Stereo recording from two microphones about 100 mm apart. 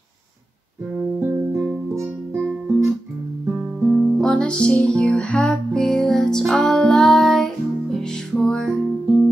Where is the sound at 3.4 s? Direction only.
25° right (ahead or behind).